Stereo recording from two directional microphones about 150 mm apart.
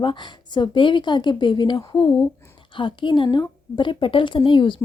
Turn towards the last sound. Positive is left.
turn(degrees=35)  # may be behind; listen again after turning